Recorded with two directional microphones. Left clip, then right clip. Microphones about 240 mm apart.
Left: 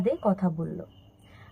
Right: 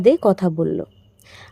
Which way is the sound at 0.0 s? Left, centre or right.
Right.